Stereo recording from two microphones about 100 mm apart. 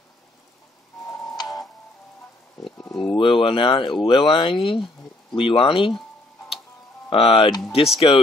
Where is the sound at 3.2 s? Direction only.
60° left (ahead or behind).